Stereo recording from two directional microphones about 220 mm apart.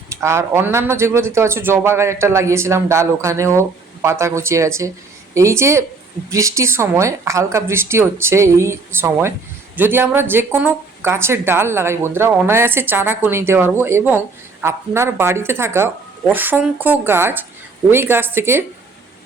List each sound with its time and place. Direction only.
0.1 s speech: 10° right (ahead or behind)